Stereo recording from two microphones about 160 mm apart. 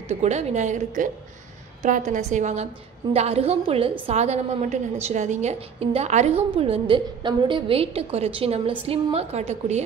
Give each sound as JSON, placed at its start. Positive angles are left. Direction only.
{"t": 0.1, "sound": "a woman's voice", "side_deg": -45}
{"t": 6.5, "sound": "a woman's voice", "side_deg": -35}